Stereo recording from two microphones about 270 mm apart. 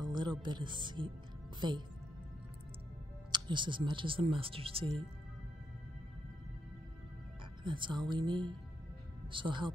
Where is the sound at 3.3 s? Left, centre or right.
Centre.